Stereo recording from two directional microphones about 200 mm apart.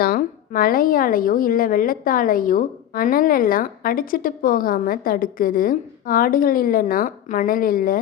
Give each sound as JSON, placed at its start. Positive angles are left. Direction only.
{"t": 0.0, "sound": "a woman's voice", "side_deg": 45}